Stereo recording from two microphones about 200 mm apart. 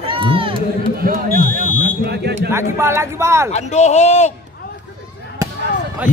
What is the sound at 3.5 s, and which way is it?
Speech, 35° left (ahead or behind).